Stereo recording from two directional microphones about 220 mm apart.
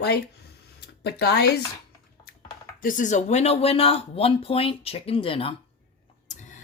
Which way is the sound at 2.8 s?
35° left (ahead or behind).